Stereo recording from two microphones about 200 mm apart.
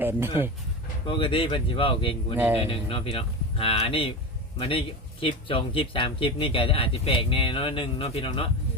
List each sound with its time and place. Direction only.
0.0 s speech: 10° right (ahead or behind)
1.0 s speech: 25° left (ahead or behind)
2.3 s speech: 10° right (ahead or behind)
2.6 s speech: 25° left (ahead or behind)